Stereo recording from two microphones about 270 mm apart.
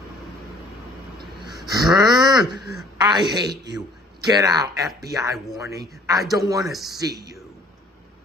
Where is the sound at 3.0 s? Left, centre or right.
Centre.